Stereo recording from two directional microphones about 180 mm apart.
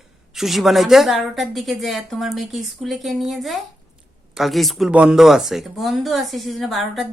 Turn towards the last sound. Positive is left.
turn(degrees=0)  # may be behind; listen again after turning